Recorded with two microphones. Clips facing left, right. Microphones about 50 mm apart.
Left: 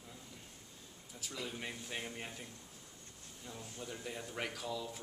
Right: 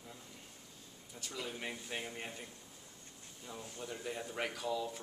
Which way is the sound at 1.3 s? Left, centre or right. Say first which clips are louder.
Right 1 dB; centre.